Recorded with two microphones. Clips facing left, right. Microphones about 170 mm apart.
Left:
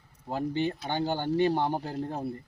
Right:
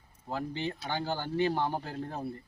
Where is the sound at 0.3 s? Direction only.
20° left (ahead or behind).